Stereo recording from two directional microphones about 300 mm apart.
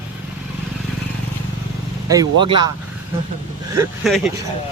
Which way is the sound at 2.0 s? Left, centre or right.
Centre.